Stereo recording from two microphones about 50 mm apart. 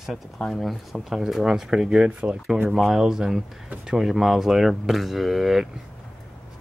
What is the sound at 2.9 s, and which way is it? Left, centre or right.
Speech, centre.